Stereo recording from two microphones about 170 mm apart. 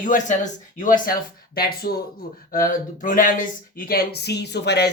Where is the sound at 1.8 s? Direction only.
65° left (ahead or behind).